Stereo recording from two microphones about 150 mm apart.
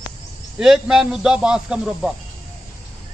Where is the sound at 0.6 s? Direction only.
5° right (ahead or behind).